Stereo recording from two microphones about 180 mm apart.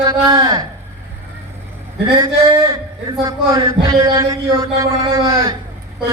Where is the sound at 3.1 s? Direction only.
20° right (ahead or behind).